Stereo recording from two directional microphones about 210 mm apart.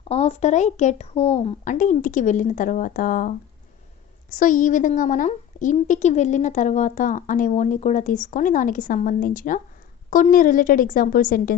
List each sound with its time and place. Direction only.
0.1 s a woman's voice: 30° left (ahead or behind)